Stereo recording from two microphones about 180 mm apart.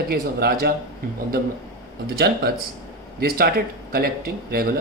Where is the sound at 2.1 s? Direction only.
60° right (ahead or behind).